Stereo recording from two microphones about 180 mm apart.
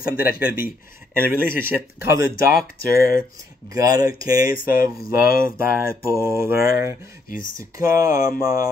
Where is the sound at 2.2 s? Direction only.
55° left (ahead or behind).